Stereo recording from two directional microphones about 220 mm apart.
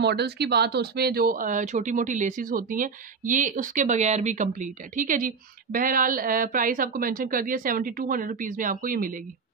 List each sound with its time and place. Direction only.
0.0 s speech: 50° right (ahead or behind)